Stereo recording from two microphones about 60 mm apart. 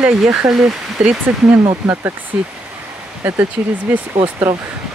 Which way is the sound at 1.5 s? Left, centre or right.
Right.